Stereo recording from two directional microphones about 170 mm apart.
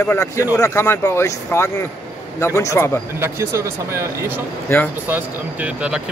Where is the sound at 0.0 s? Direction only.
15° left (ahead or behind).